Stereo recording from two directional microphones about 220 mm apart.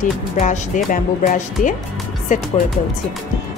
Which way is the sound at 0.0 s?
35° left (ahead or behind).